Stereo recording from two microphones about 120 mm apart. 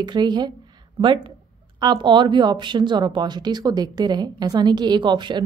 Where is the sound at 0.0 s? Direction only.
35° right (ahead or behind).